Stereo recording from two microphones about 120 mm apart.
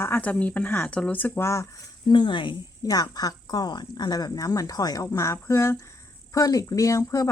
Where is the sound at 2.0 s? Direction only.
40° left (ahead or behind).